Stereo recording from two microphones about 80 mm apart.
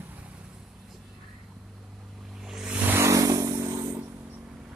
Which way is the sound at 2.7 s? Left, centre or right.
Right.